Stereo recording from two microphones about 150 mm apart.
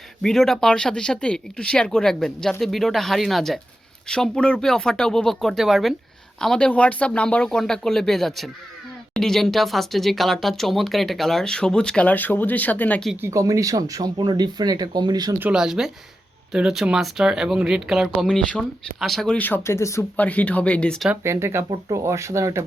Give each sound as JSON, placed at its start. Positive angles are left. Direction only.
{"t": 0.2, "sound": "speech", "side_deg": 0}
{"t": 13.2, "sound": "speech", "side_deg": -20}
{"t": 15.4, "sound": "speech", "side_deg": -5}
{"t": 21.2, "sound": "speech", "side_deg": -15}